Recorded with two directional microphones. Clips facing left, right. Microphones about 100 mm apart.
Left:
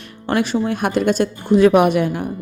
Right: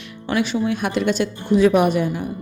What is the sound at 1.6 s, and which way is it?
Speech, 60° left (ahead or behind).